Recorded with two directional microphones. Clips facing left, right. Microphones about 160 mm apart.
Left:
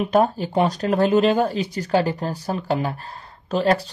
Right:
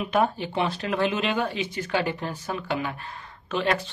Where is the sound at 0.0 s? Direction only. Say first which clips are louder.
Left 5 dB; 40° left (ahead or behind).